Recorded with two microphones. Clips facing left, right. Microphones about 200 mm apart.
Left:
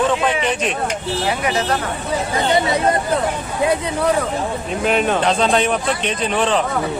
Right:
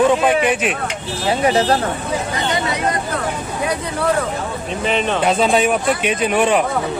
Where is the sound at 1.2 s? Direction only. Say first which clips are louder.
Right 7 dB; 30° right (ahead or behind).